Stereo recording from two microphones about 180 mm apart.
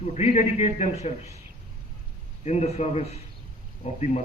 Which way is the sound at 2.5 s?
35° left (ahead or behind).